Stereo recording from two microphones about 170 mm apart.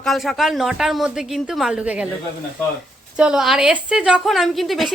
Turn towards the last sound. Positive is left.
turn(degrees=0)  # may be behind; listen again after turning